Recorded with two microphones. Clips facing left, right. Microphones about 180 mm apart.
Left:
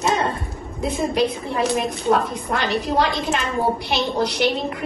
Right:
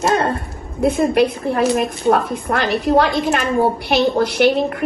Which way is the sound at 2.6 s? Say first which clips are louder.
Right 3 dB; centre (ahead or behind).